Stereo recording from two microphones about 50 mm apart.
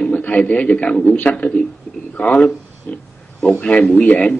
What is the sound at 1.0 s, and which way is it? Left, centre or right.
Speech, left.